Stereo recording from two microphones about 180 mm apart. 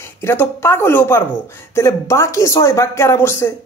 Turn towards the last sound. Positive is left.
turn(degrees=15)  # may be behind; listen again after turning